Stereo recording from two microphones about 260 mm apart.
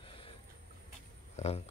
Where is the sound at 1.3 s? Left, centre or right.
Left.